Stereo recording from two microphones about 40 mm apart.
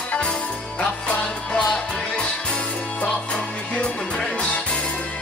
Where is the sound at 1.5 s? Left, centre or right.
Centre.